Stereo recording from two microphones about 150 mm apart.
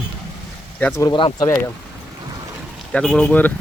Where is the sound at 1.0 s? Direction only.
30° left (ahead or behind).